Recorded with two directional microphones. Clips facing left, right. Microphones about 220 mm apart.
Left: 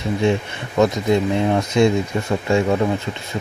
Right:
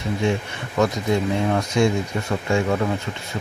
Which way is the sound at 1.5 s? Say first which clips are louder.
Left 4 dB; 20° left (ahead or behind).